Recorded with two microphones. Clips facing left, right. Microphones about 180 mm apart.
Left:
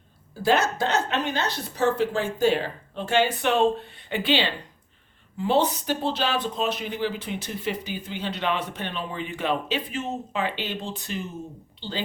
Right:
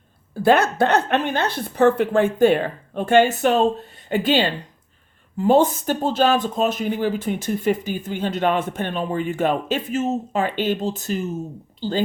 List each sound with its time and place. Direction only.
0.4 s a woman's voice: 55° right (ahead or behind)
3.4 s speech: 40° right (ahead or behind)